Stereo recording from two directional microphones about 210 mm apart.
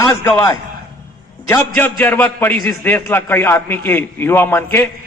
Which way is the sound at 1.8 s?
10° left (ahead or behind).